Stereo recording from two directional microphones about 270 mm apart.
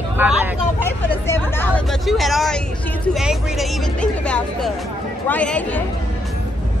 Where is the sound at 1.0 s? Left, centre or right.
Centre.